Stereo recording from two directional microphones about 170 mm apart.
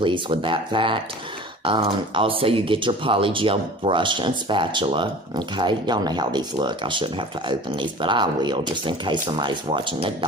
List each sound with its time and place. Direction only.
0.0 s speech: 30° right (ahead or behind)